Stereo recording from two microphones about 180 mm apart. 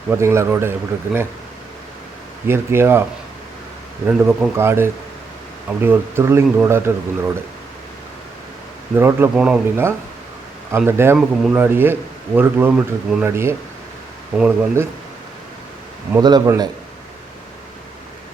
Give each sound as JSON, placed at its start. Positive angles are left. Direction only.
{"t": 0.1, "sound": "speech", "side_deg": -15}
{"t": 2.5, "sound": "speech", "side_deg": -15}
{"t": 4.0, "sound": "speech", "side_deg": -10}
{"t": 9.0, "sound": "speech", "side_deg": -10}
{"t": 16.1, "sound": "a man's voice", "side_deg": -20}